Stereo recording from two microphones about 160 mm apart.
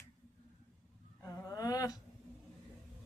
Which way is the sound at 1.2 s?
20° left (ahead or behind).